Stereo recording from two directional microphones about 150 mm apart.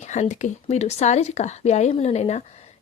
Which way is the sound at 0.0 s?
50° left (ahead or behind).